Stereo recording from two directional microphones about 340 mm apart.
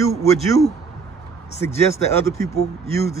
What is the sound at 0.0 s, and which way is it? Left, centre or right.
Speech, centre.